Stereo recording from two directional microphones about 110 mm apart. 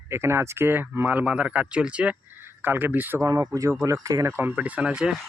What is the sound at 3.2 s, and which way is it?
Speech, 35° right (ahead or behind).